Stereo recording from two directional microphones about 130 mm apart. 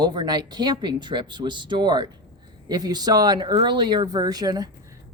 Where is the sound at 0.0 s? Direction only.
35° right (ahead or behind).